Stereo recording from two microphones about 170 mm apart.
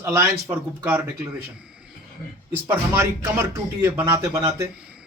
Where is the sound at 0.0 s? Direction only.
10° right (ahead or behind).